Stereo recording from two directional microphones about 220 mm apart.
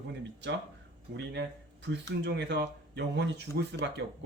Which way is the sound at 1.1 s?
50° right (ahead or behind).